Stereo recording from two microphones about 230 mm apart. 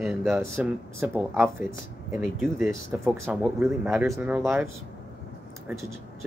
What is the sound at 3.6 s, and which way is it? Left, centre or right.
Speech, centre.